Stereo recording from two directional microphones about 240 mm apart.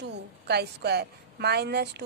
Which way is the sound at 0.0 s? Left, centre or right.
Right.